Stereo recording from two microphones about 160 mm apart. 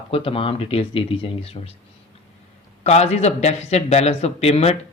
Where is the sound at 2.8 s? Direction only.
45° left (ahead or behind).